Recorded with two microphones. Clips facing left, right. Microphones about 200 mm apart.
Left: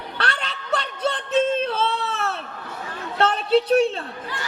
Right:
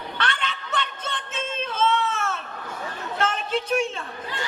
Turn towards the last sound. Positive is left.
turn(degrees=35)  # may be behind; listen again after turning